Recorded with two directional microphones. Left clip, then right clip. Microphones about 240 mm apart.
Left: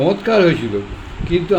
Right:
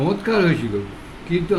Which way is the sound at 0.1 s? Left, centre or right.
Centre.